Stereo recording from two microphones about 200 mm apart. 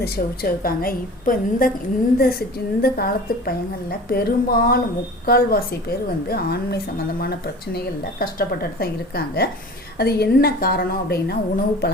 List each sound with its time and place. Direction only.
0.0 s a woman's voice: 45° left (ahead or behind)